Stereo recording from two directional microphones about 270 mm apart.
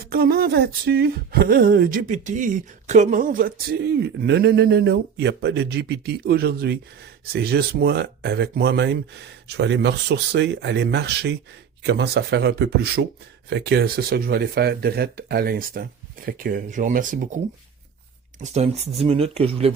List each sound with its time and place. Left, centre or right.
0.0 s speech: right